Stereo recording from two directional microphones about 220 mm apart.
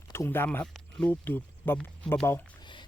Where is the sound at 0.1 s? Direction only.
10° left (ahead or behind).